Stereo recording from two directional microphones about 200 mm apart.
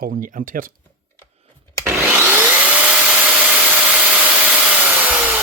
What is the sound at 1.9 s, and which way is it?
Vacuum cleaner, 10° right (ahead or behind).